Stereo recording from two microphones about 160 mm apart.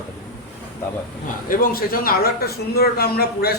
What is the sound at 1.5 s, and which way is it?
A man's voice, 65° left (ahead or behind).